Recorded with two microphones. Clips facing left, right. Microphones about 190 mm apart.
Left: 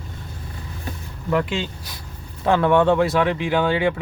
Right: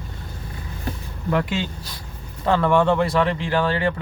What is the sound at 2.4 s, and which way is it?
Speech, 10° left (ahead or behind).